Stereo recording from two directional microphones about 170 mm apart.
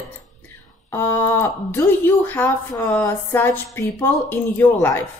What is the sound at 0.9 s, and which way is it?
Speech, 15° left (ahead or behind).